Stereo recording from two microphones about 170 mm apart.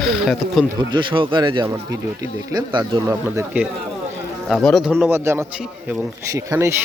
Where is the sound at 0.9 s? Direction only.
30° right (ahead or behind).